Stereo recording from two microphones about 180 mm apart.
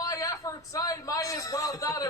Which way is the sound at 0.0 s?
20° left (ahead or behind).